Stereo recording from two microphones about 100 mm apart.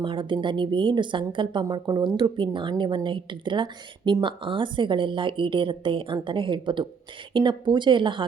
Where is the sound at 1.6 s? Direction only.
40° right (ahead or behind).